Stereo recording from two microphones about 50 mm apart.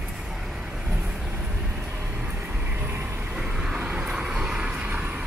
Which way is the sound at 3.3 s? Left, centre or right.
Centre.